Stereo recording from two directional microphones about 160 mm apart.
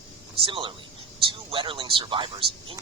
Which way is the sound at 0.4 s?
30° right (ahead or behind).